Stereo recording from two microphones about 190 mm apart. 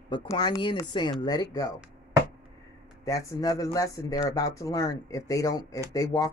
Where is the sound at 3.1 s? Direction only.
15° left (ahead or behind).